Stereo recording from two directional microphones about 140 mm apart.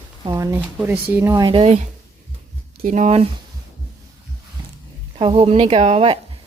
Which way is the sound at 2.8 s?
55° right (ahead or behind).